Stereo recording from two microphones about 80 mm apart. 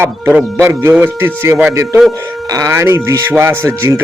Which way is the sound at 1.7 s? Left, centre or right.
Right.